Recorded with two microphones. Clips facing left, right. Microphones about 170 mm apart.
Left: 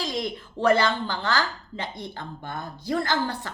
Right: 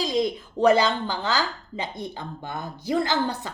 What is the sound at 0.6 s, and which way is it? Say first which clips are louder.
Speech: right 2 dB; 15° right (ahead or behind).